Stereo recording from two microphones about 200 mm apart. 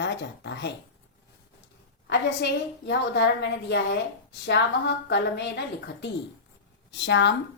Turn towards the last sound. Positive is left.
turn(degrees=60)  # may be behind; listen again after turning